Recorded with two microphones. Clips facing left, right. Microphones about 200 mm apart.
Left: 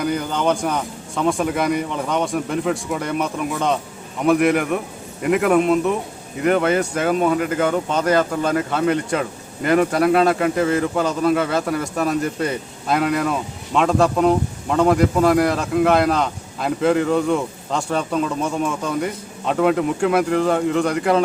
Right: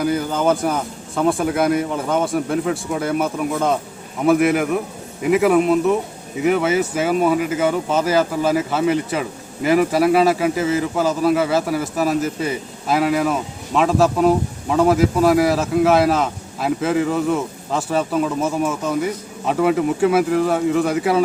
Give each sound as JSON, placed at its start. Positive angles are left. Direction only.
{"t": 0.0, "sound": "a man's voice", "side_deg": -5}